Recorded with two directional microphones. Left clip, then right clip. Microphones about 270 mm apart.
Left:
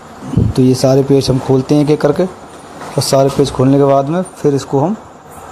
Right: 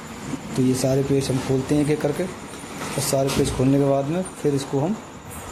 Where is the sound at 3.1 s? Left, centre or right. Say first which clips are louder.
Left 11 dB; left.